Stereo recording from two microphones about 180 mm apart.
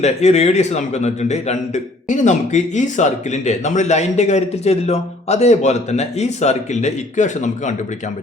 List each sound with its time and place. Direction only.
0.0 s a man's voice: 40° left (ahead or behind)